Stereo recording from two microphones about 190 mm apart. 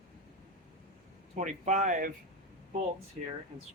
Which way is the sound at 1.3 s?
40° right (ahead or behind).